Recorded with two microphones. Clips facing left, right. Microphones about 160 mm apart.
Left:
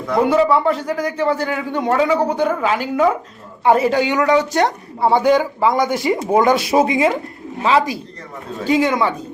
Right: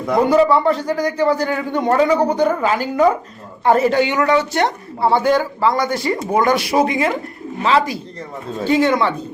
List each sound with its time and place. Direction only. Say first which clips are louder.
0.2 s a woman's voice: right 1 dB; 5° left (ahead or behind)